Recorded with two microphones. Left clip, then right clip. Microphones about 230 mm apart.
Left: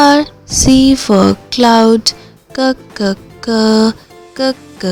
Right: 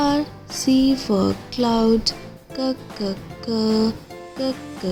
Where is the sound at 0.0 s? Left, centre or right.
Left.